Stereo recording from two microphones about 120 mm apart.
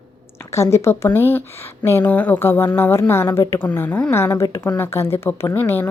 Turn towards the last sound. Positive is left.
turn(degrees=15)  # may be behind; listen again after turning